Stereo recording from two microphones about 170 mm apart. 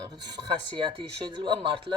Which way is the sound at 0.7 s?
30° right (ahead or behind).